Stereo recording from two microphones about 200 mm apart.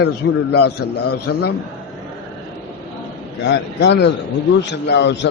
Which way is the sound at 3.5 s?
60° left (ahead or behind).